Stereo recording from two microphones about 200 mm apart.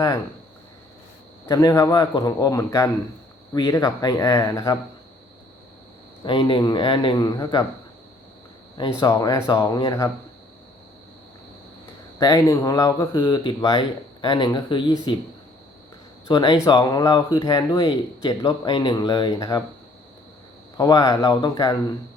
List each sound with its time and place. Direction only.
1.5 s a man's voice: 15° left (ahead or behind)
6.2 s speech: 25° left (ahead or behind)
9.0 s speech: 20° left (ahead or behind)
12.2 s speech: 15° left (ahead or behind)
16.3 s speech: 20° left (ahead or behind)
20.7 s speech: 20° left (ahead or behind)